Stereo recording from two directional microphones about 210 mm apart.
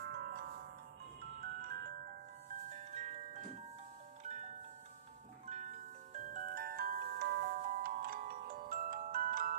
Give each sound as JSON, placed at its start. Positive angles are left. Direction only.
{"t": 0.0, "sound": "music", "side_deg": -50}
{"t": 2.5, "sound": "music", "side_deg": -35}
{"t": 4.2, "sound": "music", "side_deg": -35}
{"t": 5.5, "sound": "glockenspiel", "side_deg": -35}